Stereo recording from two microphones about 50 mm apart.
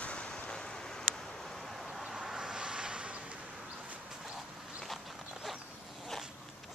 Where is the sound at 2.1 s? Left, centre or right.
Centre.